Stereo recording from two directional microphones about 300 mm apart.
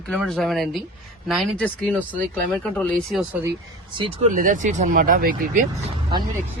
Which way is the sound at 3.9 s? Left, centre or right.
Centre.